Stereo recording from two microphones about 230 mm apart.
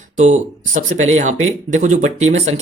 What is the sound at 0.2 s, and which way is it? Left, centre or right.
Speech, right.